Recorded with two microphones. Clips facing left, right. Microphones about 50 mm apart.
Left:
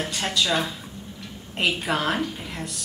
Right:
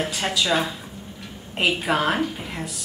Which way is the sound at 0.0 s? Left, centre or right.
Centre.